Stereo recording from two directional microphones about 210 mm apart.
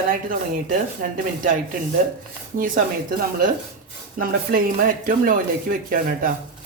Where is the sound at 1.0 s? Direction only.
35° right (ahead or behind).